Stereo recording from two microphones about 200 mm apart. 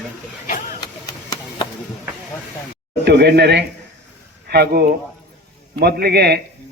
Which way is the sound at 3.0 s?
55° right (ahead or behind).